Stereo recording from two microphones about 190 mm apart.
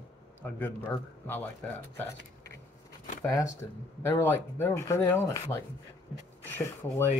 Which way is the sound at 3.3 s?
15° left (ahead or behind).